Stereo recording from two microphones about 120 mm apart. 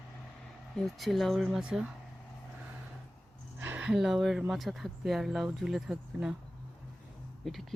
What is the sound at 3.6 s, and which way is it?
Speech, 10° right (ahead or behind).